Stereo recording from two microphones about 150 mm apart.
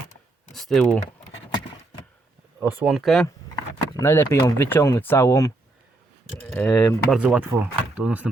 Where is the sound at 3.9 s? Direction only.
20° left (ahead or behind).